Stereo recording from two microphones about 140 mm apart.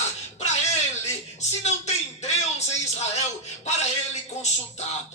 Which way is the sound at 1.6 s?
55° left (ahead or behind).